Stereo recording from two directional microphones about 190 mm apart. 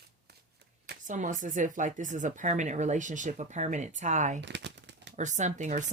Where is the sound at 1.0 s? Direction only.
40° right (ahead or behind).